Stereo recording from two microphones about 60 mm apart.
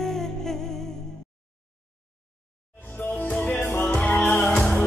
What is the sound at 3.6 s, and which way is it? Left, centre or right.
Music, left.